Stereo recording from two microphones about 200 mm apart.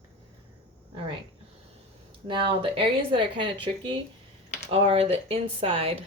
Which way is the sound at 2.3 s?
25° right (ahead or behind).